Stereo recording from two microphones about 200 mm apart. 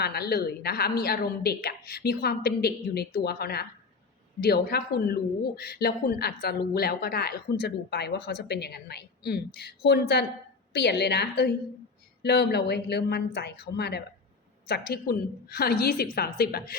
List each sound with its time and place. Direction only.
0.0 s a woman's voice: 50° left (ahead or behind)